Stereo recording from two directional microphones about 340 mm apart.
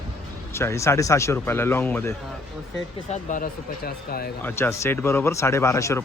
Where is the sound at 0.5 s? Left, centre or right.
Centre.